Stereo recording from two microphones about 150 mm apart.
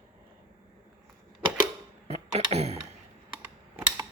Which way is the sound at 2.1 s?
45° right (ahead or behind).